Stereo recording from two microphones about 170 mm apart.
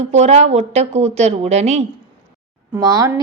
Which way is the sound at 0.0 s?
40° right (ahead or behind).